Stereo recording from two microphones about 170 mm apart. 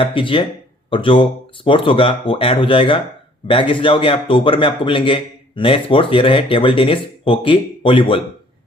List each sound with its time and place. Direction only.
0.0 s a man's voice: 30° left (ahead or behind)